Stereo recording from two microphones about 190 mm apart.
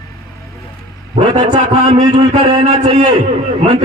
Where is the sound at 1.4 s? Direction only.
25° right (ahead or behind).